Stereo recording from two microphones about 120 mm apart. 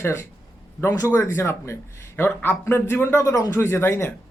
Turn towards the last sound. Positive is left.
turn(degrees=20)  # may be behind; listen again after turning